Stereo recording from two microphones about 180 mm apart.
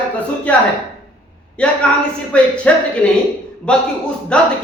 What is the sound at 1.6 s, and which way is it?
A man's voice, 5° left (ahead or behind).